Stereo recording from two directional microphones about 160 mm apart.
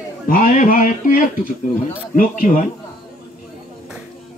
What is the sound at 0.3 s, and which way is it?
A man's voice, 60° left (ahead or behind).